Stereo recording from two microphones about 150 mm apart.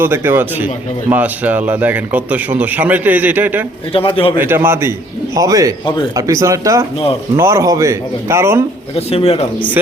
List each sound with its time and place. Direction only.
0.0 s a man's voice: 15° right (ahead or behind)
3.9 s a man's voice: 40° left (ahead or behind)
4.4 s a man's voice: 15° right (ahead or behind)
9.0 s speech: 40° left (ahead or behind)